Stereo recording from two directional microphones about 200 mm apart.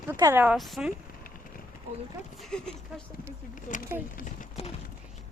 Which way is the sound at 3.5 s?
40° left (ahead or behind).